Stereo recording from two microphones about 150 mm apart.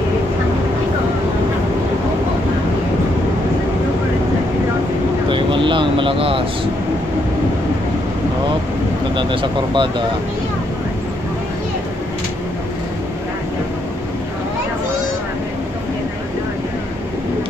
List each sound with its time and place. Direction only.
5.3 s vehicle: 35° right (ahead or behind)
9.1 s speech: 35° right (ahead or behind)